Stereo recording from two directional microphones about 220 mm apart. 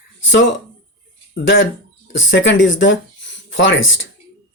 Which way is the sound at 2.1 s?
60° left (ahead or behind).